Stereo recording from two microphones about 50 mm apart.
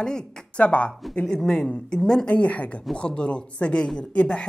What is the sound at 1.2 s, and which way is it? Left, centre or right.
Speech, centre.